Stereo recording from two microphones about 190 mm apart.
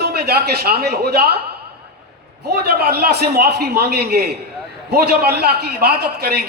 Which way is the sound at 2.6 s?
55° right (ahead or behind).